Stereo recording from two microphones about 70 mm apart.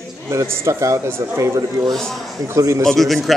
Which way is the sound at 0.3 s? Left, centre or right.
Right.